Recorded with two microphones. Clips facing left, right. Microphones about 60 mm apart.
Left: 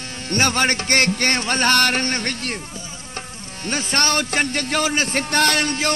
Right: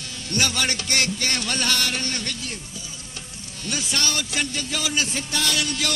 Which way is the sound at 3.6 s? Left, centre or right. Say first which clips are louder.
Left 6 dB; left.